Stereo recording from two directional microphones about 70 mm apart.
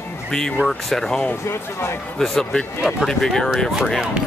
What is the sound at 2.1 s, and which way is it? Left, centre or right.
Speech, centre.